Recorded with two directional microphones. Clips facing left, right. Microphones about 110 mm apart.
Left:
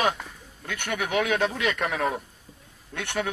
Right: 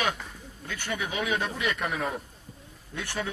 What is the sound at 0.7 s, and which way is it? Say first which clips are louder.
Speech: left 5 dB; 70° left (ahead or behind).